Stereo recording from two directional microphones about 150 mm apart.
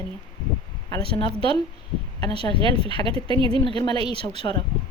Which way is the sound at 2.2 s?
40° right (ahead or behind).